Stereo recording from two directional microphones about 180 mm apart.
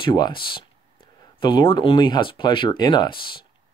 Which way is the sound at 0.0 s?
25° left (ahead or behind).